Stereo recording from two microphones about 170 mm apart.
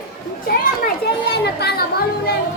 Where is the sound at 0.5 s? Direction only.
60° left (ahead or behind).